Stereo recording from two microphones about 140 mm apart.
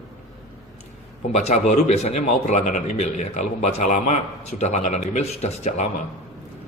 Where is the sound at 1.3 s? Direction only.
55° left (ahead or behind).